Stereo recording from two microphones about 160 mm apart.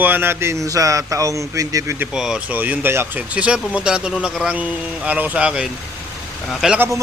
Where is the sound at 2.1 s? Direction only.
5° right (ahead or behind).